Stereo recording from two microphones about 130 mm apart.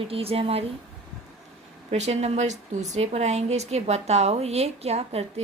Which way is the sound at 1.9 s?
55° right (ahead or behind).